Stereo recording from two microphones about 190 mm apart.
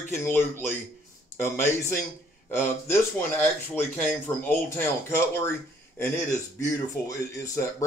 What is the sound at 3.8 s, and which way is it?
Speech, 10° left (ahead or behind).